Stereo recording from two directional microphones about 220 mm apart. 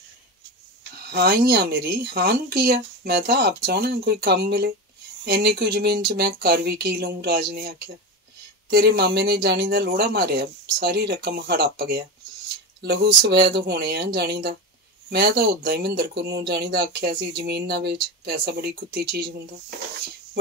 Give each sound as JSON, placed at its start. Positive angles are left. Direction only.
{"t": 1.1, "sound": "speech", "side_deg": -45}